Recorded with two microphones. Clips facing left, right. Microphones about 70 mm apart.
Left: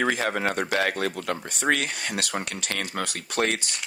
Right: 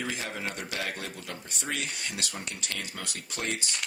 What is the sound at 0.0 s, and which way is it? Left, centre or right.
Speech, left.